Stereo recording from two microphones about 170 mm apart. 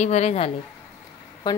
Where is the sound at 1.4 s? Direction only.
25° left (ahead or behind).